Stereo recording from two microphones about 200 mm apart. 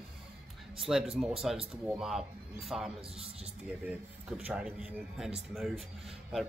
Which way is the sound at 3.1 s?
30° right (ahead or behind).